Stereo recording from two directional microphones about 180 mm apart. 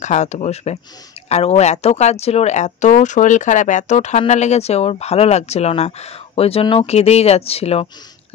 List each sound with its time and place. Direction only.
0.0 s speech: 40° left (ahead or behind)